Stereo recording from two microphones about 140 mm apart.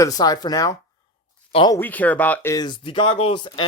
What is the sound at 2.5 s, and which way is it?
Speech, 30° left (ahead or behind).